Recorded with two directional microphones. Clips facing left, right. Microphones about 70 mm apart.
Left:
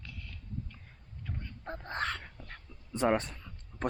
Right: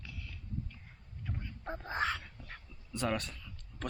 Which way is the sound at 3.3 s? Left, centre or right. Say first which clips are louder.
Left 1 dB; left.